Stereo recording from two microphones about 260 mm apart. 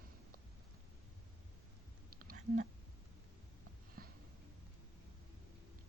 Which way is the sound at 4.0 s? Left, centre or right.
Right.